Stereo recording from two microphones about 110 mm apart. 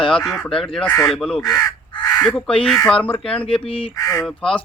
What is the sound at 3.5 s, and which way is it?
Speech, 55° left (ahead or behind).